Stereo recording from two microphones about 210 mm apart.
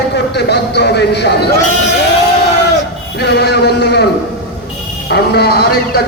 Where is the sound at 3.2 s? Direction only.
50° left (ahead or behind).